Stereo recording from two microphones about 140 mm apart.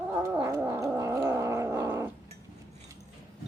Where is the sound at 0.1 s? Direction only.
20° right (ahead or behind).